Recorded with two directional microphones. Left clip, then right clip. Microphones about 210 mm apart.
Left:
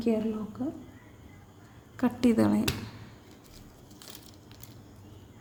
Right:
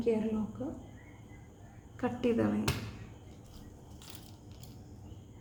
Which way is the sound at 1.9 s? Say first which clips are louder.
Left 5 dB; 50° left (ahead or behind).